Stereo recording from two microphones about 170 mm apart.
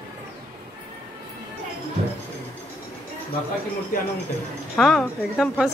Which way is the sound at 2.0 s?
35° right (ahead or behind).